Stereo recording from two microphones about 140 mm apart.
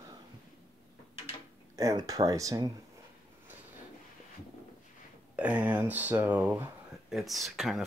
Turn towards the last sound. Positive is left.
turn(degrees=0)  # may be behind; listen again after turning